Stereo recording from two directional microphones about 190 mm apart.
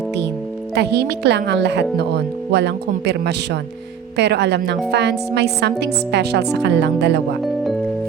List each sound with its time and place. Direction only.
0.8 s speech: 60° right (ahead or behind)
7.4 s music: centre (ahead or behind)